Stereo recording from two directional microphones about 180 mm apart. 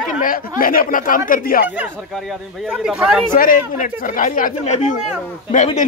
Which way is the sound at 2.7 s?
5° right (ahead or behind).